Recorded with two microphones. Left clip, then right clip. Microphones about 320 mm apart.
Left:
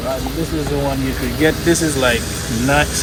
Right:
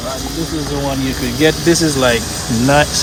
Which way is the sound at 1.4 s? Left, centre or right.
Right.